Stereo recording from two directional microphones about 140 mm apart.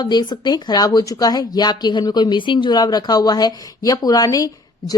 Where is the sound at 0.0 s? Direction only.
30° left (ahead or behind).